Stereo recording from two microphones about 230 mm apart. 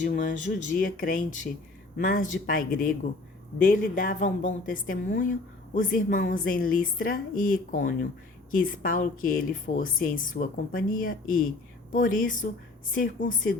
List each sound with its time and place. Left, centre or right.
0.0 s a woman's voice: left